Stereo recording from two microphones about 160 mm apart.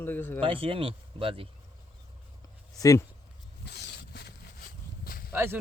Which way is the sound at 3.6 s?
90° left.